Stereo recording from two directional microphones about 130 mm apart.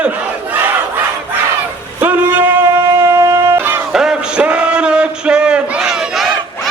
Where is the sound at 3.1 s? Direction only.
25° right (ahead or behind).